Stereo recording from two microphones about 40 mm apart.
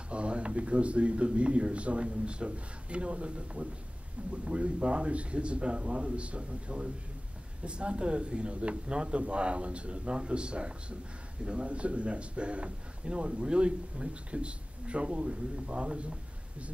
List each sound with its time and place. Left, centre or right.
0.1 s a man's voice: right